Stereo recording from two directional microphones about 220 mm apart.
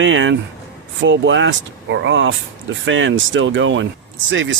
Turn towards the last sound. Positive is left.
turn(degrees=-55)  # may be behind; listen again after turning